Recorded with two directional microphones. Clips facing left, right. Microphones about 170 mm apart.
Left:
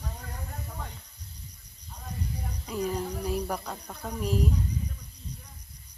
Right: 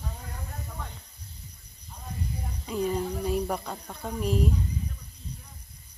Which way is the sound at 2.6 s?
Centre (ahead or behind).